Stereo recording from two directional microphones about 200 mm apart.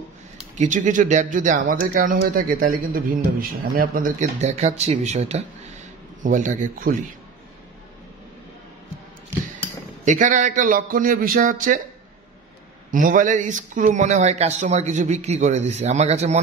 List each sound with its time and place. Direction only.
0.6 s speech: 40° right (ahead or behind)
10.0 s speech: 40° right (ahead or behind)
12.9 s speech: 40° right (ahead or behind)